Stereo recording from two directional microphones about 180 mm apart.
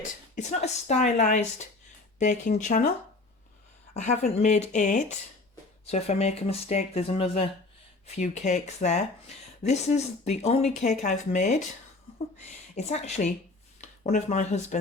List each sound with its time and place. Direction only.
0.3 s speech: 40° left (ahead or behind)
3.9 s a woman's voice: 40° left (ahead or behind)
12.7 s speech: 40° left (ahead or behind)